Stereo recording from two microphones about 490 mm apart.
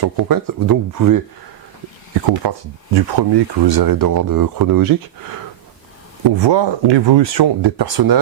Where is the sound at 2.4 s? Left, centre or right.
Right.